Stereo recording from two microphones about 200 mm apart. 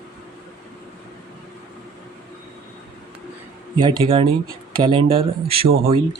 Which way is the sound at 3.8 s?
25° right (ahead or behind).